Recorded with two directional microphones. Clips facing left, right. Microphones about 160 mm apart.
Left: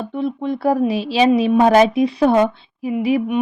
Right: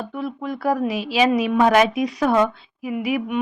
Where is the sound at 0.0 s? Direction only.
25° left (ahead or behind).